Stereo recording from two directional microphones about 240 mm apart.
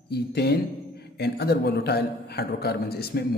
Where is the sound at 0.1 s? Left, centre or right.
Left.